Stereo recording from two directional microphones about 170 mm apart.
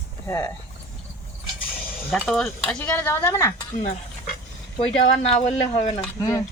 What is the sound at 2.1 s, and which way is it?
Speech, centre (ahead or behind).